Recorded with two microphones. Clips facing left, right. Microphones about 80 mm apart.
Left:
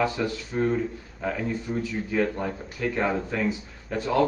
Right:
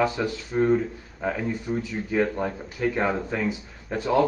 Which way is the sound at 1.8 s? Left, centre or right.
Right.